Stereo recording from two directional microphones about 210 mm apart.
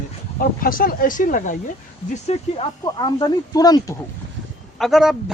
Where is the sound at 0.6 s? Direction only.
40° left (ahead or behind).